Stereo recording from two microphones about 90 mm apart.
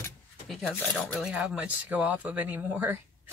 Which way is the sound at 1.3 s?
10° right (ahead or behind).